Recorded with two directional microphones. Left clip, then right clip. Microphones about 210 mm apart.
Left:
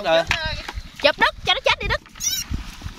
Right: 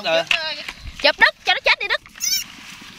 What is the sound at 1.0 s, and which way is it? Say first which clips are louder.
Speech: right 3 dB; 10° left (ahead or behind).